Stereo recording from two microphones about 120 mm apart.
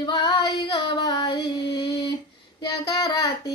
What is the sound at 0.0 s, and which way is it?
Female singing, 35° left (ahead or behind).